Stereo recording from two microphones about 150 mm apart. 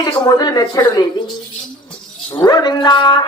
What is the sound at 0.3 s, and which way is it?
Speech, 25° left (ahead or behind).